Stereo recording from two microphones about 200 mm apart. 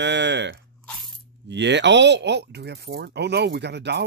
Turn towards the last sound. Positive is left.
turn(degrees=-60)  # may be behind; listen again after turning